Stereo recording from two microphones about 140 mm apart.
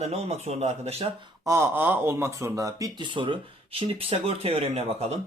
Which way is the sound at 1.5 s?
20° right (ahead or behind).